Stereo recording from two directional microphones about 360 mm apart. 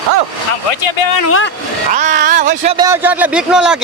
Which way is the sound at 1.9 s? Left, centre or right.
Centre.